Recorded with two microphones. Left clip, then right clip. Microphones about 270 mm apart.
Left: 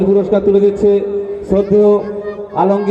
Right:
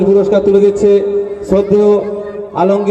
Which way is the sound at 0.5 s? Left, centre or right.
Right.